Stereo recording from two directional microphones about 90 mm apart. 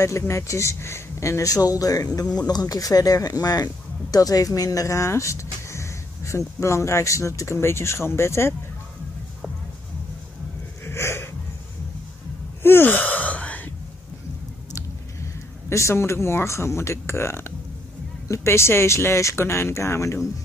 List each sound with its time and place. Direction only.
0.0 s speech: 30° left (ahead or behind)
10.9 s wheeze: 30° left (ahead or behind)
12.6 s gasp: 25° left (ahead or behind)
15.7 s speech: 30° left (ahead or behind)